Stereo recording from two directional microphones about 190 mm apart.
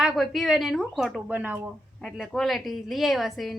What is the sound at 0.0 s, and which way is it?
A woman's voice, centre (ahead or behind).